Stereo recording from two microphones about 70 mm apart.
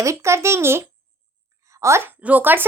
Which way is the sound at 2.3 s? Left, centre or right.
Right.